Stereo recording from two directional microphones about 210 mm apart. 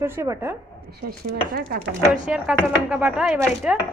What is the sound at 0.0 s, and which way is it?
Speech, 10° right (ahead or behind).